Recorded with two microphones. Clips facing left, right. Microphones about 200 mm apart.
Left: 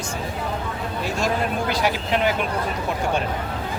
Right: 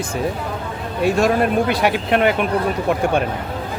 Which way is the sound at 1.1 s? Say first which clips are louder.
Right 6 dB; 60° right (ahead or behind).